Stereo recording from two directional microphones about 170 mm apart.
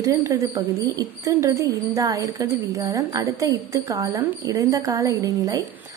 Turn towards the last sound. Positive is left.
turn(degrees=-20)  # may be behind; listen again after turning